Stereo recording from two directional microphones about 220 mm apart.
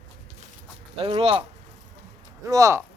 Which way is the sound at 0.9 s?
25° right (ahead or behind).